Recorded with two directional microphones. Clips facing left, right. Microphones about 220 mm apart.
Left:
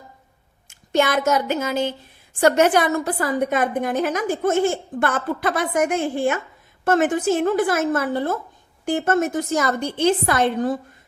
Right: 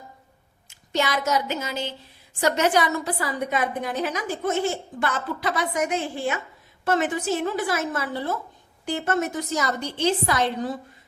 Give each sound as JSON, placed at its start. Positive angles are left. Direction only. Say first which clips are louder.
{"t": 0.7, "sound": "a woman's voice", "louder": "left 6 dB", "side_deg": 50}